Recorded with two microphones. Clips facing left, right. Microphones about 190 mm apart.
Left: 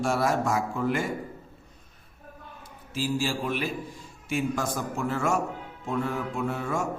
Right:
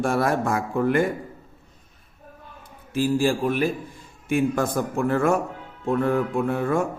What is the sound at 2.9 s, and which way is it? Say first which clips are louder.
A man's voice: right 7 dB; 55° right (ahead or behind).